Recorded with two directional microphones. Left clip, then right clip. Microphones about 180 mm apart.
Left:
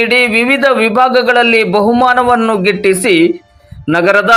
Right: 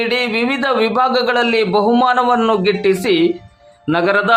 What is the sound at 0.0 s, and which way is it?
A man's voice, 20° left (ahead or behind).